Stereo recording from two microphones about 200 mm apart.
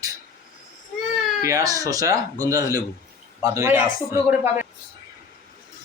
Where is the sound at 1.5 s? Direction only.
15° right (ahead or behind).